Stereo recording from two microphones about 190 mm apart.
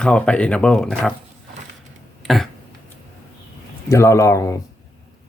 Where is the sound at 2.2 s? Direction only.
Centre (ahead or behind).